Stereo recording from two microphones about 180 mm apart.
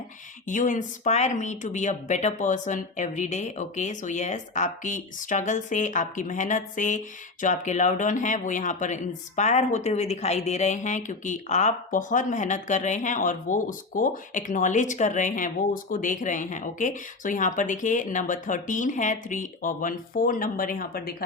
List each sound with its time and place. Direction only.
0.4 s speech: 45° left (ahead or behind)